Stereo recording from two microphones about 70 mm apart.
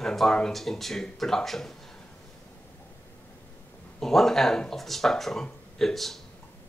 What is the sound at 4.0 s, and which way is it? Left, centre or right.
Speech, centre.